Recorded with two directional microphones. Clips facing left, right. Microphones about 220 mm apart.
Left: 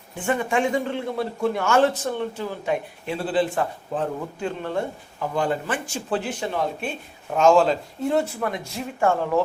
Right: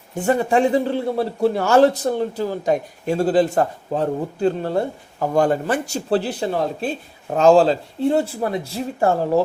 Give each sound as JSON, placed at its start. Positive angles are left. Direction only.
{"t": 0.2, "sound": "a man's voice", "side_deg": -40}